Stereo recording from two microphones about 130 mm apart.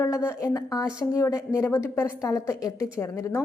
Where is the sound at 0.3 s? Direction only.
25° left (ahead or behind).